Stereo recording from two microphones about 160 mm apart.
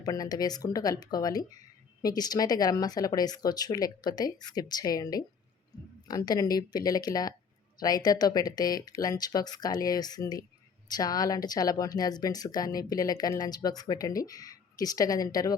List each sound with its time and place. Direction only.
0.0 s speech: 25° left (ahead or behind)